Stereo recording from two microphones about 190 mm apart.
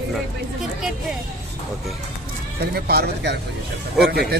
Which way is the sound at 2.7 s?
55° right (ahead or behind).